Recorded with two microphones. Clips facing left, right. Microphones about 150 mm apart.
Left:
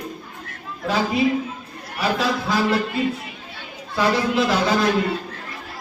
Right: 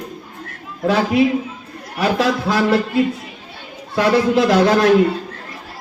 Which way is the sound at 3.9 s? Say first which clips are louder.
Right 5 dB; 70° right (ahead or behind).